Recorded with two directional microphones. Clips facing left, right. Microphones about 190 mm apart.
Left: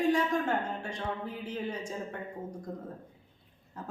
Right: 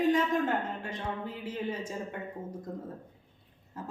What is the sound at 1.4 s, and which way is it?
Speech, 5° right (ahead or behind).